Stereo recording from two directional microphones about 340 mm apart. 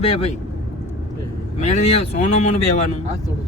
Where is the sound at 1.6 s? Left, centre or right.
Centre.